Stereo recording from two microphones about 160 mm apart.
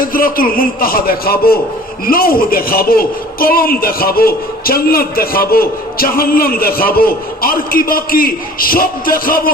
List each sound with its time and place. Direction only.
0.0 s a man's voice: 65° left (ahead or behind)